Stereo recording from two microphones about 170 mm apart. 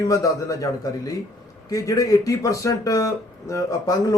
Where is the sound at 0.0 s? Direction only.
20° left (ahead or behind).